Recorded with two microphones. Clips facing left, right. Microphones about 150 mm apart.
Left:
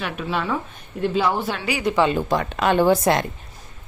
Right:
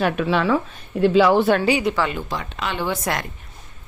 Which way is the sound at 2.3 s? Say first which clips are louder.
Left 8 dB; 50° left (ahead or behind).